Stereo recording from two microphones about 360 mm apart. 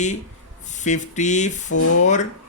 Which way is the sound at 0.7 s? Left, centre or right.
Centre.